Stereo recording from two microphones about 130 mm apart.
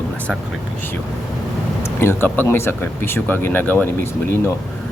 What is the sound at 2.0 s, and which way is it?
Speech, 15° left (ahead or behind).